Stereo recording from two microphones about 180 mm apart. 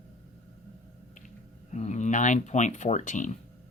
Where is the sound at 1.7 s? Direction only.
40° left (ahead or behind).